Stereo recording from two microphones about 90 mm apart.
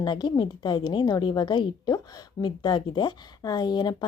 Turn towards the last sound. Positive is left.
turn(degrees=50)  # may be behind; listen again after turning